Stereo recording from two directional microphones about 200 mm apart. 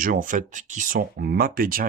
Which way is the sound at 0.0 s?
40° right (ahead or behind).